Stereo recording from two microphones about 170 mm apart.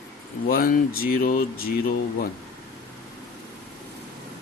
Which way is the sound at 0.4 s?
60° left (ahead or behind).